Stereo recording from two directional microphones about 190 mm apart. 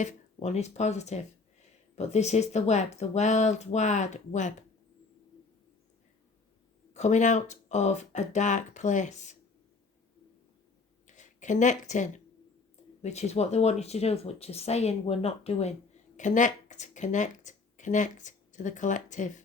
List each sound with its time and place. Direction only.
0.0 s speech: 35° left (ahead or behind)
6.9 s speech: 40° left (ahead or behind)
11.0 s speech: 40° left (ahead or behind)